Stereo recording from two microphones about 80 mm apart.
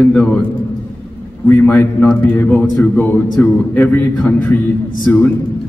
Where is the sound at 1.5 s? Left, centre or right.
Left.